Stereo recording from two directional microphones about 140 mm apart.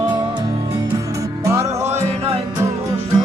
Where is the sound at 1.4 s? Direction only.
20° right (ahead or behind).